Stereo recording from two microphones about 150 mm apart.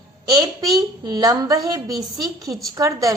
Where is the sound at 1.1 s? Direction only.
25° right (ahead or behind).